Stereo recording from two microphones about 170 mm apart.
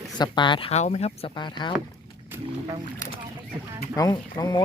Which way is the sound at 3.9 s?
20° left (ahead or behind).